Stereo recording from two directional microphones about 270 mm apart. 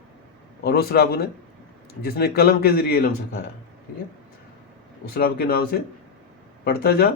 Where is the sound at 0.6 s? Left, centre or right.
Left.